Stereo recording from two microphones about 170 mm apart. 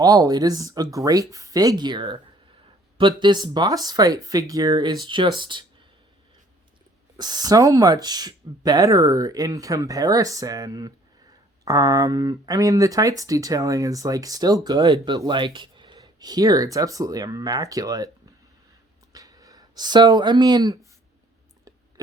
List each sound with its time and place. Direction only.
0.0 s speech: 25° right (ahead or behind)
7.2 s speech: 25° right (ahead or behind)
19.1 s speech: 20° right (ahead or behind)